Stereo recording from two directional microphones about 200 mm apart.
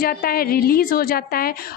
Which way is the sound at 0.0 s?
50° left (ahead or behind).